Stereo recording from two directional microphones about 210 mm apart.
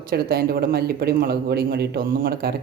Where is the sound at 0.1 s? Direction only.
45° right (ahead or behind).